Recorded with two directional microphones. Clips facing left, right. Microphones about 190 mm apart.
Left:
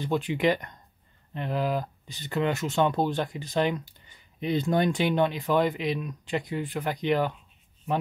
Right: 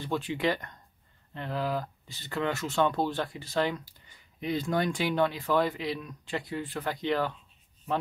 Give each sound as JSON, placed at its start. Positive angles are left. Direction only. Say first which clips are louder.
{"t": 0.0, "sound": "speech", "louder": "left 4 dB", "side_deg": 15}